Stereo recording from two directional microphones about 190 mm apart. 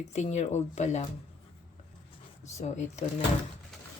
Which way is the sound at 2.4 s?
35° left (ahead or behind).